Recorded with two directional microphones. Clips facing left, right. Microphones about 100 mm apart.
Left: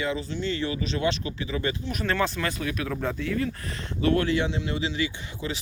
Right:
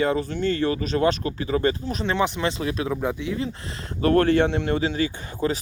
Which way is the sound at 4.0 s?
45° right (ahead or behind).